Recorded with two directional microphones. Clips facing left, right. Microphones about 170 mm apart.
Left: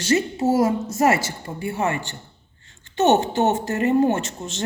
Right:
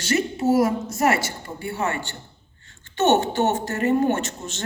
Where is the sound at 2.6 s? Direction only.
30° left (ahead or behind).